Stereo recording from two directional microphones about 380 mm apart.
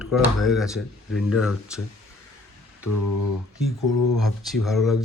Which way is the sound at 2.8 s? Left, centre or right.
Left.